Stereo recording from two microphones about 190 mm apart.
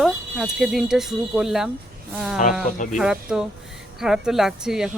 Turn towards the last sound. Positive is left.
turn(degrees=0)  # may be behind; listen again after turning